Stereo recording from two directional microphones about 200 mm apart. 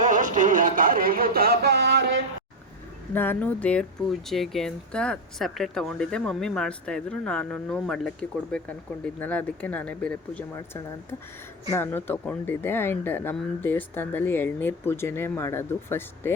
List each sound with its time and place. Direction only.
0.0 s a sound: 40° right (ahead or behind); by 2.2 s 60° right (ahead or behind)
3.1 s speech: 10° left (ahead or behind)
11.7 s speech: 10° left (ahead or behind)